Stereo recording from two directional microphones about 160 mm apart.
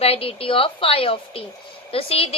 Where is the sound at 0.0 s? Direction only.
35° left (ahead or behind).